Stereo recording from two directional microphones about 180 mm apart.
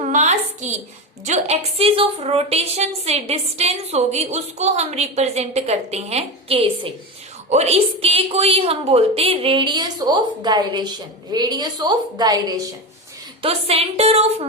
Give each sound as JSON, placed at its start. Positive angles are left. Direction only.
{"t": 0.0, "sound": "a sound", "side_deg": -40}
{"t": 1.2, "sound": "a woman's voice", "side_deg": -40}
{"t": 13.4, "sound": "a woman's voice", "side_deg": -35}